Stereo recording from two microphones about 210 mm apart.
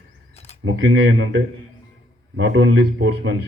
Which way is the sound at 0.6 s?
65° right (ahead or behind).